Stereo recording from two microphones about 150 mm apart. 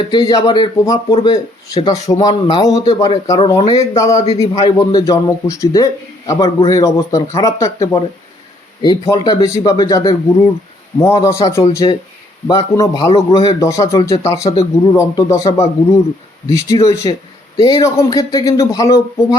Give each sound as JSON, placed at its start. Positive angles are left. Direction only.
{"t": 0.3, "sound": "a man's voice", "side_deg": 25}
{"t": 13.6, "sound": "a man's voice", "side_deg": 20}